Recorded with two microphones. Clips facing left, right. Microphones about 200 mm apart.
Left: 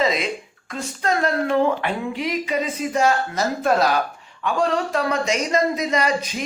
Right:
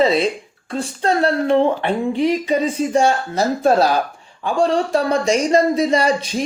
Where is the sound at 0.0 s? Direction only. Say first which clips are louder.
Right 6 dB; 30° right (ahead or behind).